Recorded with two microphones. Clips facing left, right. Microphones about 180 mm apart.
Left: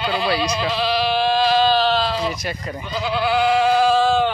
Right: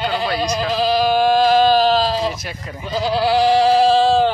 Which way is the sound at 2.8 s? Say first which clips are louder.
Right 4 dB; 35° right (ahead or behind).